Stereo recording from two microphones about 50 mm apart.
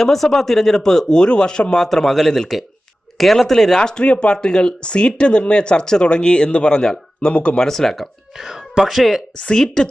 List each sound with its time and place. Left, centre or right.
0.0 s speech: centre; by 7.6 s left
7.6 s speech: centre
8.4 s speech: centre
9.4 s speech: centre